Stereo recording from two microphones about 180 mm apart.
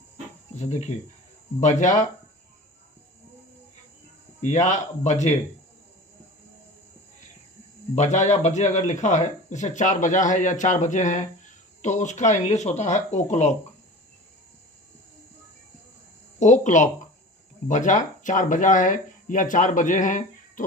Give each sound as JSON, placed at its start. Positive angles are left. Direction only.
{"t": 0.5, "sound": "cricket", "side_deg": 40}
{"t": 4.4, "sound": "speech", "side_deg": 40}
{"t": 7.9, "sound": "speech", "side_deg": 40}
{"t": 16.4, "sound": "speech", "side_deg": 40}